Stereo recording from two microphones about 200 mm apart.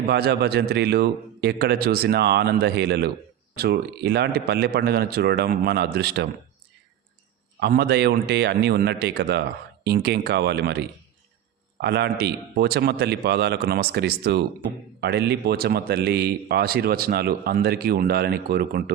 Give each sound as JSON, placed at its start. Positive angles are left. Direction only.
{"t": 0.1, "sound": "a man's voice", "side_deg": -55}
{"t": 7.6, "sound": "a man's voice", "side_deg": -55}